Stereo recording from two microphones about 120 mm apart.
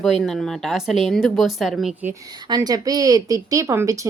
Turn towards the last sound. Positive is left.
turn(degrees=-25)  # may be behind; listen again after turning